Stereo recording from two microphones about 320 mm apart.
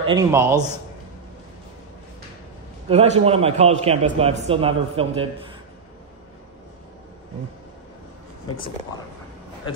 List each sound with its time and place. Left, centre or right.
0.0 s a man's voice: centre
2.9 s a man's voice: centre